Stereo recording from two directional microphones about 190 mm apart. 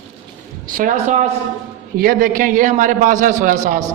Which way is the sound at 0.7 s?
40° right (ahead or behind).